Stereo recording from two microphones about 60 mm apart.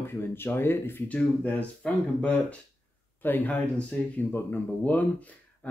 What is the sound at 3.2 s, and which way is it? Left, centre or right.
Speech, left.